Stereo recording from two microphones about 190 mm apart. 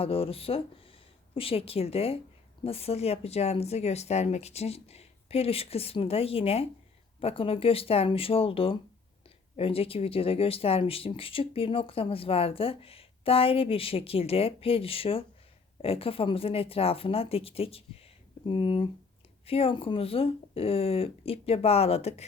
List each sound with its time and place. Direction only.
0.0 s speech: 30° left (ahead or behind)